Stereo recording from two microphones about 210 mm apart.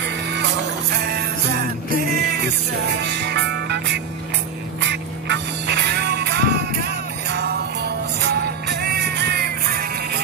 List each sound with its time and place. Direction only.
1.0 s music: 50° right (ahead or behind)